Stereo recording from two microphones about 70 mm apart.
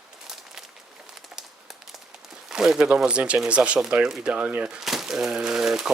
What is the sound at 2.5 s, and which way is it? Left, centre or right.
Speech, centre.